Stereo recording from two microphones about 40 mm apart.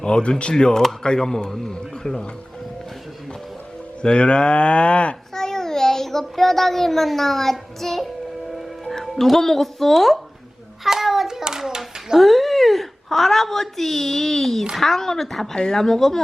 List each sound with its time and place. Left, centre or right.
0.0 s speech: left
0.5 s a man's voice: centre
4.0 s speech: left
5.3 s a child's voice: centre
7.8 s music: centre
8.9 s speech: centre
10.8 s hands: centre
12.2 s a woman's voice: centre
15.5 s speech: left
15.8 s a man's voice: centre